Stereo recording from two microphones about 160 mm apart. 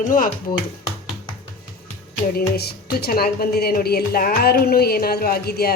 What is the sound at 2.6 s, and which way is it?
A woman's voice, 80° left.